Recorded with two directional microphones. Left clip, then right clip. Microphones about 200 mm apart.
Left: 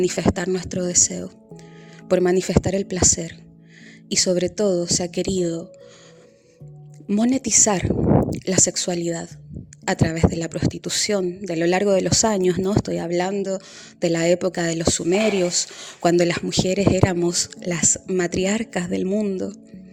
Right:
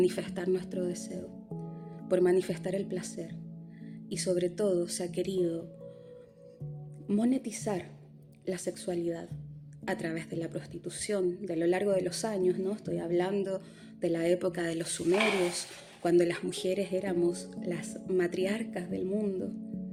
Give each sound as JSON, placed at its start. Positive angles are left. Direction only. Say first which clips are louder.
{"t": 0.0, "sound": "speech", "louder": "left 9 dB", "side_deg": 40}
{"t": 7.1, "sound": "speech", "louder": "left 11 dB", "side_deg": 45}